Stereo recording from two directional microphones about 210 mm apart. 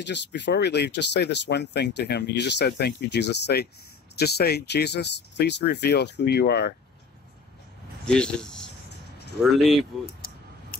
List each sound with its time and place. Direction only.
0.0 s speech: 55° left (ahead or behind)
8.0 s speech: 5° left (ahead or behind)
10.2 s a sound: 45° left (ahead or behind)